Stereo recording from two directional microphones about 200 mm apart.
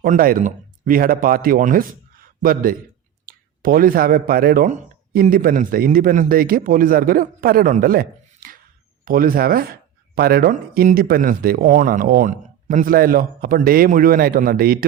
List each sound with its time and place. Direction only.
0.0 s speech: 45° right (ahead or behind)